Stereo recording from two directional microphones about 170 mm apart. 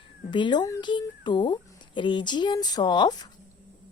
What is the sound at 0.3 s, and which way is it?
Speech, 25° left (ahead or behind).